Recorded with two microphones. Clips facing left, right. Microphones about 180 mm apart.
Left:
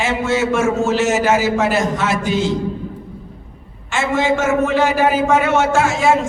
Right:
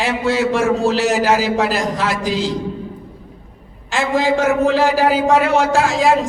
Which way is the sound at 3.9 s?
35° right (ahead or behind).